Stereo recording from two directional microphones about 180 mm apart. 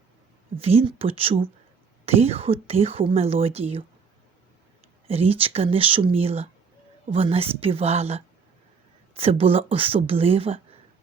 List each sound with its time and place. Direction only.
0.5 s speech: 35° right (ahead or behind)
5.0 s speech: 35° right (ahead or behind)